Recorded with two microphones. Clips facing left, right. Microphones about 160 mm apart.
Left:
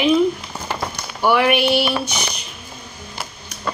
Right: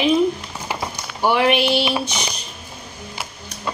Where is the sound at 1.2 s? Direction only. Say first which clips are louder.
Left 1 dB; 25° right (ahead or behind).